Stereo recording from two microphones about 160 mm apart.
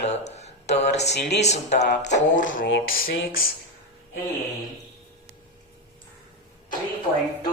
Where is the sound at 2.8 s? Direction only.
65° left (ahead or behind).